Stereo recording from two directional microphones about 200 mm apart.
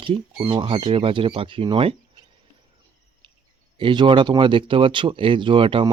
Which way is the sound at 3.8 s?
25° right (ahead or behind).